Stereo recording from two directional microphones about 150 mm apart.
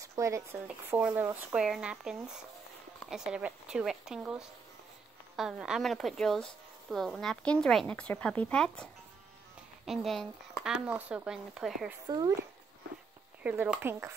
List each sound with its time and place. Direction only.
0.0 s speech: 20° right (ahead or behind); by 8.8 s 5° left (ahead or behind)
9.8 s speech: centre (ahead or behind)
13.4 s speech: 10° right (ahead or behind)